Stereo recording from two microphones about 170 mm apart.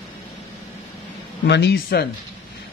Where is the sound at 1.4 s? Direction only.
90° left; by 2.1 s 65° left (ahead or behind).